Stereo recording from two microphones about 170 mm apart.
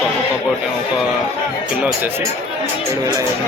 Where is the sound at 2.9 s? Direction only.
20° right (ahead or behind).